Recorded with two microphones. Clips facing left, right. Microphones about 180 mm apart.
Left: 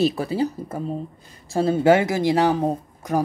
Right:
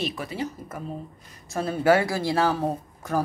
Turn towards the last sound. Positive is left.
turn(degrees=15)  # may be behind; listen again after turning